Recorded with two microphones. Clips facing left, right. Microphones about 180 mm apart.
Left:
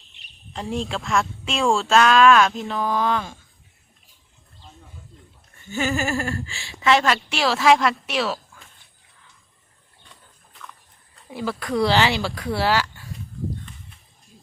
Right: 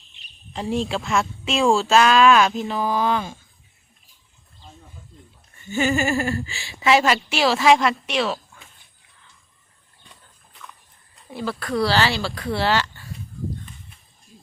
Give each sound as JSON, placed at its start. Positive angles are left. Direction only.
{"t": 0.5, "sound": "a woman's voice", "side_deg": 0}
{"t": 5.6, "sound": "a woman's voice", "side_deg": 0}
{"t": 11.3, "sound": "speech", "side_deg": 10}